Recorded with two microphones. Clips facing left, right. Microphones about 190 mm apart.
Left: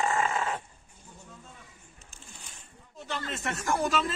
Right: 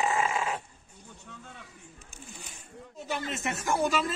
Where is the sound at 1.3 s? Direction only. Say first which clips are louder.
Right 4 dB; 80° right.